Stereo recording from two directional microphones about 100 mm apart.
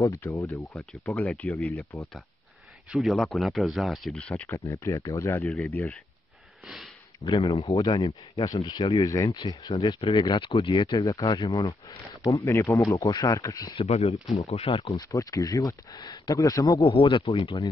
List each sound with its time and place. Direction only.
0.0 s speech: 30° left (ahead or behind)
1.1 s speech: 10° left (ahead or behind)
4.5 s speech: 30° left (ahead or behind)
5.4 s speech: centre (ahead or behind)
6.6 s snort: centre (ahead or behind)
7.2 s speech: 70° left (ahead or behind)
7.7 s speech: 40° left (ahead or behind)
9.9 s speech: 55° left (ahead or behind)
10.9 s speech: 35° left (ahead or behind)
13.7 s speech: 85° left
15.0 s speech: 35° left (ahead or behind)
16.8 s speech: 65° left (ahead or behind)